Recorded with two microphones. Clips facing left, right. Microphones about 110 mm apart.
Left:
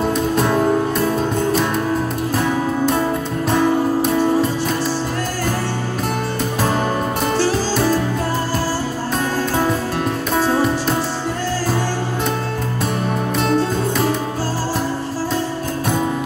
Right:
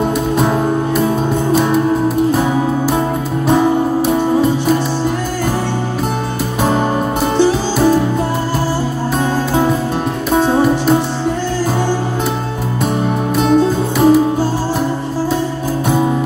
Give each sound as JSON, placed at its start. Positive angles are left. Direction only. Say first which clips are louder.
{"t": 0.4, "sound": "music", "louder": "even", "side_deg": -5}
{"t": 7.3, "sound": "music", "louder": "right 6 dB", "side_deg": -20}
{"t": 10.3, "sound": "music", "louder": "right 5 dB", "side_deg": -20}
{"t": 13.4, "sound": "music", "louder": "right 6 dB", "side_deg": -10}